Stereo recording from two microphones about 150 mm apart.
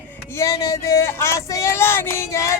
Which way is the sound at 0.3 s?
25° left (ahead or behind).